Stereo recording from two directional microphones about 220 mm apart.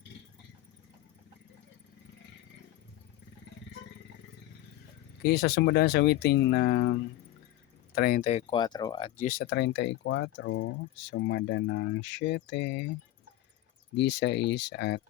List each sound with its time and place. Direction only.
5.2 s speech: 45° left (ahead or behind); by 9.2 s 25° left (ahead or behind)
9.2 s speech: 40° left (ahead or behind)
13.9 s speech: 55° left (ahead or behind)